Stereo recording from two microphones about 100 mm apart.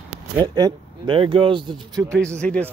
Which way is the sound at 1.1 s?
65° right (ahead or behind).